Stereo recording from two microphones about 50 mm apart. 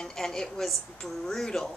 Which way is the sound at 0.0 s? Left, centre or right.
Centre.